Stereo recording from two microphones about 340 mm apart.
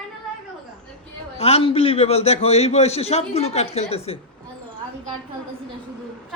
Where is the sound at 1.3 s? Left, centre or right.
Centre.